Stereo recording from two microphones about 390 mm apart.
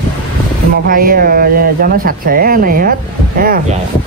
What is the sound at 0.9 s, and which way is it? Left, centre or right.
Speech, right.